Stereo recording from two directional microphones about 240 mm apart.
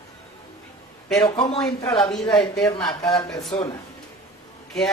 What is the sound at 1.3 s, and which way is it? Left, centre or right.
Speech, left.